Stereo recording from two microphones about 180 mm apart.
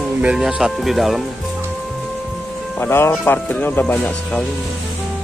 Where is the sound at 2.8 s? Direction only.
15° left (ahead or behind).